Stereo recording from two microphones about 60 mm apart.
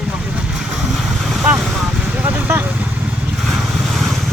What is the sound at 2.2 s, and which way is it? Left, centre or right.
Speech, right.